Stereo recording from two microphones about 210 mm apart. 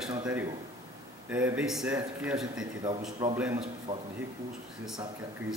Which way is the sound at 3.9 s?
20° right (ahead or behind).